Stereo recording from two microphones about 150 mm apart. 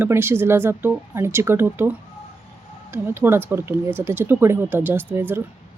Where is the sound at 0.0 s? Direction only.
15° right (ahead or behind).